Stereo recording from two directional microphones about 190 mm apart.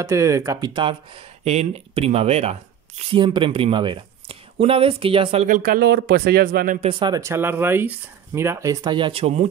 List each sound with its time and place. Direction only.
0.0 s speech: 15° right (ahead or behind)
5.5 s speech: 50° right (ahead or behind)
6.9 s speech: 25° right (ahead or behind)